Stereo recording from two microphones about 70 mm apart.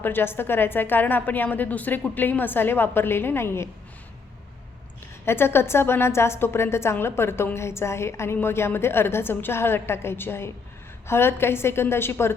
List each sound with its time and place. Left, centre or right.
0.0 s a woman's voice: left
5.2 s a woman's voice: left